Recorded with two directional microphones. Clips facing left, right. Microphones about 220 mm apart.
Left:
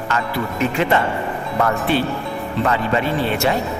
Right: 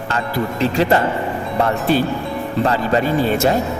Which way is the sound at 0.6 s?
35° right (ahead or behind).